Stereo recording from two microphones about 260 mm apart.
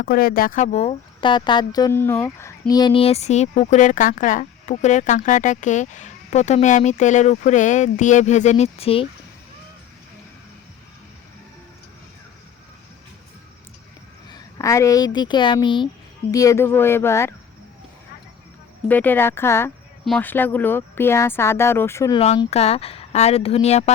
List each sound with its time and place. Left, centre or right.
0.0 s speech: left
14.3 s a woman's voice: centre
18.9 s speech: centre
22.2 s speech: left